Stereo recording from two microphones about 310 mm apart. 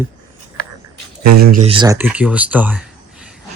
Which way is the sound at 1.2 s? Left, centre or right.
Right.